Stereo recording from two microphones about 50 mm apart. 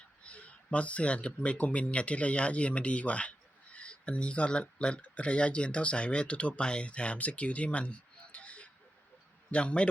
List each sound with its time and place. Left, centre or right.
0.2 s a man's voice: left